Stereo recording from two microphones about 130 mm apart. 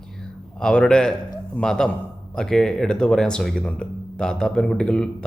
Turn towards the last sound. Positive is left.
turn(degrees=5)  # may be behind; listen again after turning